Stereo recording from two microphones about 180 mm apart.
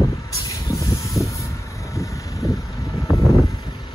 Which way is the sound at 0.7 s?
15° left (ahead or behind).